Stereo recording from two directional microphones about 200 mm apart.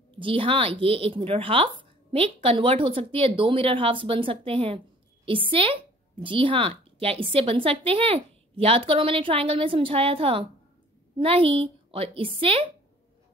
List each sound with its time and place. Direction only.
0.1 s speech: 25° right (ahead or behind)